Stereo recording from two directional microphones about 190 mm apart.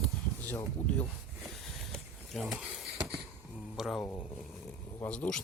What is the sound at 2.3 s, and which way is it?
Speech, 5° right (ahead or behind).